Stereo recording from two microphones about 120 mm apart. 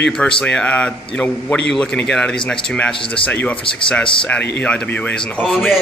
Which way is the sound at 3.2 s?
15° left (ahead or behind).